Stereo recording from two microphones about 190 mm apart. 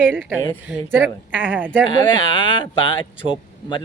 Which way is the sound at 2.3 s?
25° left (ahead or behind).